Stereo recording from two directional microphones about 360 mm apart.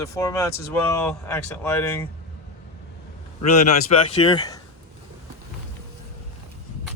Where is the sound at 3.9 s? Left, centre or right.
Centre.